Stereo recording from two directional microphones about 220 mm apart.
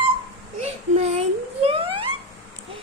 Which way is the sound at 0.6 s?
30° right (ahead or behind).